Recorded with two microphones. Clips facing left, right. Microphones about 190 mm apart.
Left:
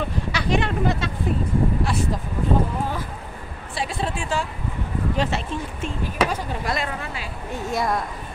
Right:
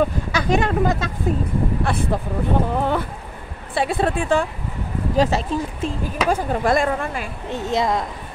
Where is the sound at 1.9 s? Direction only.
55° right (ahead or behind).